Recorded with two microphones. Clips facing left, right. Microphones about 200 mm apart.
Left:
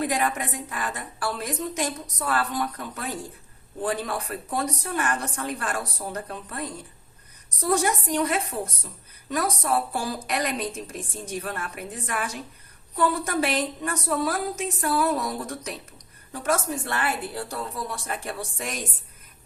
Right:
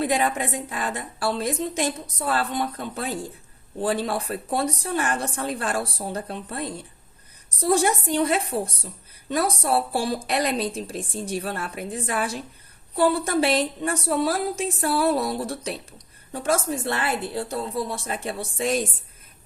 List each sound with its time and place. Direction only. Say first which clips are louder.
0.0 s a woman's voice: right 3 dB; 25° right (ahead or behind)